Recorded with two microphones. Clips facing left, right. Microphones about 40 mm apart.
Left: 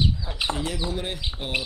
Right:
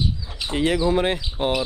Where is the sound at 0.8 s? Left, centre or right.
Right.